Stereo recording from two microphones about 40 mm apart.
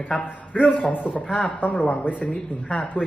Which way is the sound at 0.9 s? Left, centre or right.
Left.